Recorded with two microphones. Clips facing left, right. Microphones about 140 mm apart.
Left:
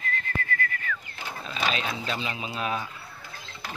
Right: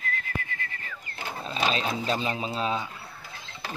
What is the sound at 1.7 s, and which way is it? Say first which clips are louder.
Speech: right 3 dB; 35° right (ahead or behind).